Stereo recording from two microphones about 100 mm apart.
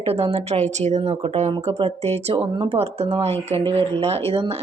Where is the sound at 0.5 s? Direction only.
65° right (ahead or behind).